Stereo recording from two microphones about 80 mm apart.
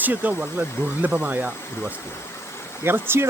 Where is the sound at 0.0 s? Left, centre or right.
Centre.